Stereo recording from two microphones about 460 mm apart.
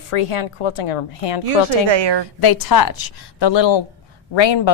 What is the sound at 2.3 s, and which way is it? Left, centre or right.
A woman's voice, left.